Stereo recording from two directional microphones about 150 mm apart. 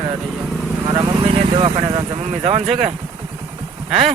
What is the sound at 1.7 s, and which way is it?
Speech, 40° right (ahead or behind).